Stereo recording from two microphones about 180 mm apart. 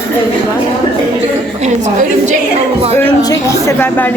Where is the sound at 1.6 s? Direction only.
40° right (ahead or behind).